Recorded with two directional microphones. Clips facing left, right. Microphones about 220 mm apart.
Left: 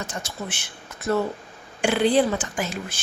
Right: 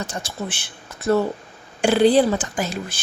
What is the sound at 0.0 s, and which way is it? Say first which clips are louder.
Speech: right 3 dB; 35° right (ahead or behind).